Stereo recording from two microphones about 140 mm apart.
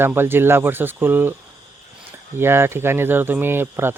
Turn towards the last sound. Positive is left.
turn(degrees=-15)  # may be behind; listen again after turning